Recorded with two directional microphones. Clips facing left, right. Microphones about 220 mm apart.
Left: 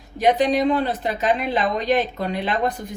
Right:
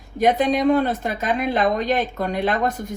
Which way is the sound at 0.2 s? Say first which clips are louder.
Even; 45° right (ahead or behind).